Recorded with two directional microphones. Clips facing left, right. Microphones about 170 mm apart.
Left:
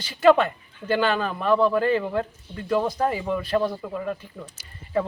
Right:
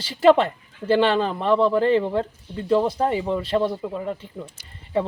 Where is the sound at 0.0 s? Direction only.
30° right (ahead or behind).